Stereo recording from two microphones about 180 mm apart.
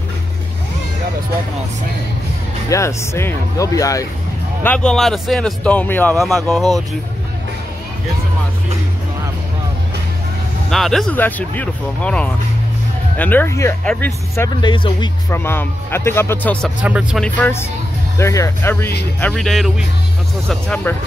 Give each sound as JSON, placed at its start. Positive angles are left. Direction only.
{"t": 2.7, "sound": "speech", "side_deg": 15}
{"t": 4.6, "sound": "speech", "side_deg": 5}
{"t": 10.7, "sound": "speech", "side_deg": 0}
{"t": 14.7, "sound": "speech", "side_deg": 25}
{"t": 15.2, "sound": "speech", "side_deg": 15}
{"t": 16.8, "sound": "speech", "side_deg": -5}
{"t": 17.2, "sound": "speech", "side_deg": 10}